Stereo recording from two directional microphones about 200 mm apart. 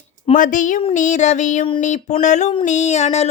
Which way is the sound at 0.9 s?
40° left (ahead or behind).